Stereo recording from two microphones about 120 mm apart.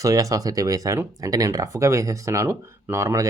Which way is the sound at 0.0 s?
30° right (ahead or behind).